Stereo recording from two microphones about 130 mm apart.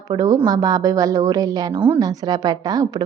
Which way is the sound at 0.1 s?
30° right (ahead or behind).